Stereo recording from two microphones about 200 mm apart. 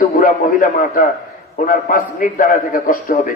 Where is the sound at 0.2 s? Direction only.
45° left (ahead or behind).